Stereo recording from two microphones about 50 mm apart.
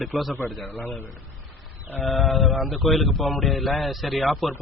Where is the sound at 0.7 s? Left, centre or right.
Left.